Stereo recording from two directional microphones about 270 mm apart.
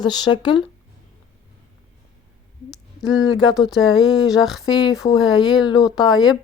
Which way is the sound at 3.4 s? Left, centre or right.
Centre.